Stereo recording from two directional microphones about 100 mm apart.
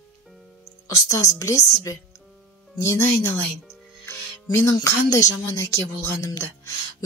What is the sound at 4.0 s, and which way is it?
Music, 25° left (ahead or behind).